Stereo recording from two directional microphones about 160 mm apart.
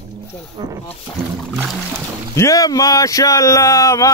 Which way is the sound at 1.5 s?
Centre (ahead or behind).